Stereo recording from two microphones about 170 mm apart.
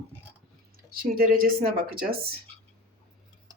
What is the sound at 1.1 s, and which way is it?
Speech, 60° right (ahead or behind).